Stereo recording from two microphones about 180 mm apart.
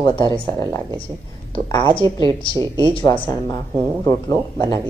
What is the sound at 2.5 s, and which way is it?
Speech, 25° right (ahead or behind).